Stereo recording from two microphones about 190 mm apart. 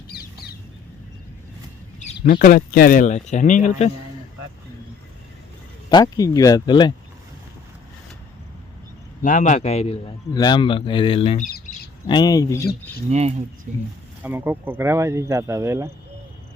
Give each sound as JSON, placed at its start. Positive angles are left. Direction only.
{"t": 2.1, "sound": "speech", "side_deg": 50}
{"t": 5.9, "sound": "a man's voice", "side_deg": 20}
{"t": 9.2, "sound": "a man's voice", "side_deg": 40}
{"t": 11.3, "sound": "bird", "side_deg": 40}
{"t": 12.0, "sound": "a man's voice", "side_deg": 20}
{"t": 13.1, "sound": "speech", "side_deg": -35}
{"t": 14.2, "sound": "speech", "side_deg": -10}